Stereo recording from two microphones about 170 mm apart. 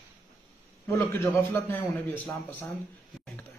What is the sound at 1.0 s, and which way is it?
A man's voice, 15° left (ahead or behind).